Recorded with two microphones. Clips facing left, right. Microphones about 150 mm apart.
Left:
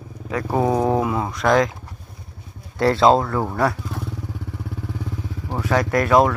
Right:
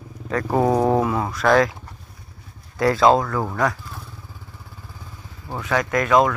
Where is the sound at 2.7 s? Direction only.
30° left (ahead or behind).